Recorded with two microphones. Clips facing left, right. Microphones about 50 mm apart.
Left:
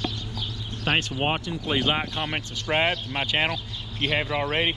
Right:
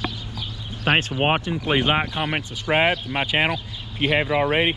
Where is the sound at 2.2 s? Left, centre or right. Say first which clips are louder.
Right 4 dB; centre.